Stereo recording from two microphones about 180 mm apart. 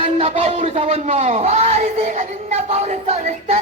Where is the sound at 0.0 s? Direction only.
30° right (ahead or behind).